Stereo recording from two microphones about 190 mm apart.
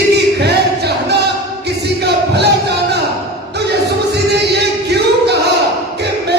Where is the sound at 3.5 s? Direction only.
60° right (ahead or behind).